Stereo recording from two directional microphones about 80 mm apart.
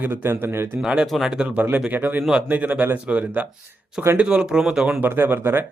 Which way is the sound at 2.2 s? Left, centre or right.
Centre.